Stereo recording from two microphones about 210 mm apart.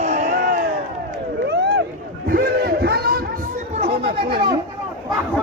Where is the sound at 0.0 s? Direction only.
35° right (ahead or behind).